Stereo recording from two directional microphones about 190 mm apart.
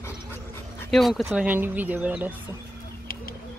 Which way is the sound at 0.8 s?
Centre (ahead or behind).